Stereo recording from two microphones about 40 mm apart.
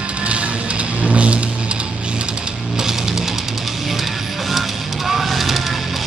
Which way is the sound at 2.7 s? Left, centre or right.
Centre.